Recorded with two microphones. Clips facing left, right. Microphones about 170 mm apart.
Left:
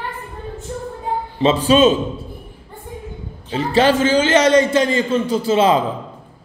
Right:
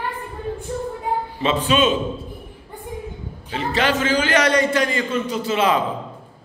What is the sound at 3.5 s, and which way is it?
A man's voice, 30° left (ahead or behind).